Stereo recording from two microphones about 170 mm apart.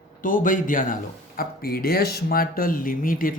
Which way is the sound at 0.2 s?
50° left (ahead or behind).